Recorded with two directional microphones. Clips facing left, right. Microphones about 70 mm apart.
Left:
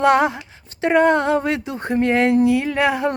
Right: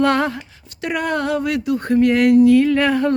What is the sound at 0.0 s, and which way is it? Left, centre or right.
Speech, centre.